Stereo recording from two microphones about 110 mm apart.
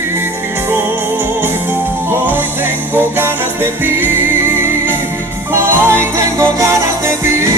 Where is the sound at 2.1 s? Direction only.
20° right (ahead or behind).